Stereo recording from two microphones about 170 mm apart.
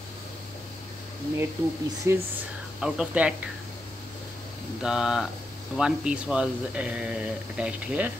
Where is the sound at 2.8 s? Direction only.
5° right (ahead or behind).